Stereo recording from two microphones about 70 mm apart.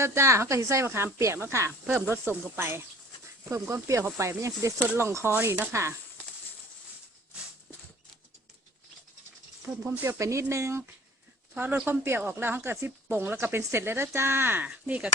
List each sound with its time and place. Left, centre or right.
0.0 s speech: right
3.5 s speech: right
4.9 s speech: right
9.7 s speech: right
10.2 s speech: right
11.5 s speech: right
14.7 s speech: centre